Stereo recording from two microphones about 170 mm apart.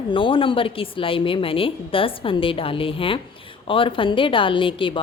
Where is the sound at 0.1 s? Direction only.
30° left (ahead or behind).